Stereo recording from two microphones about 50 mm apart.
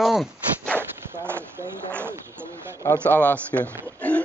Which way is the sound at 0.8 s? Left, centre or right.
Right.